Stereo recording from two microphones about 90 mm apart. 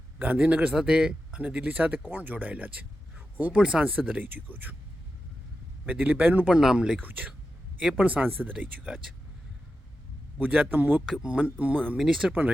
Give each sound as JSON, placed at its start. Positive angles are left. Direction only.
{"t": 0.2, "sound": "speech", "side_deg": -15}
{"t": 5.8, "sound": "speech", "side_deg": -20}
{"t": 6.6, "sound": "speech", "side_deg": -5}
{"t": 10.4, "sound": "speech", "side_deg": -15}
{"t": 11.0, "sound": "speech", "side_deg": -5}
{"t": 11.9, "sound": "speech", "side_deg": -5}